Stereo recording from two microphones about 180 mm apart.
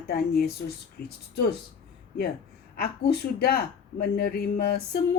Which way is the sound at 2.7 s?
60° left (ahead or behind).